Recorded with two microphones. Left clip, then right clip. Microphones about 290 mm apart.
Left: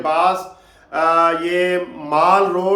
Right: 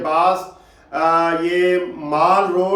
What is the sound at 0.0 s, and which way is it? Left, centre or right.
A man's voice, centre.